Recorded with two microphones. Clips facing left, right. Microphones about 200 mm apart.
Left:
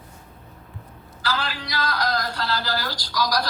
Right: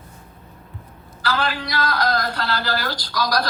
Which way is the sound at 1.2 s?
60° right (ahead or behind).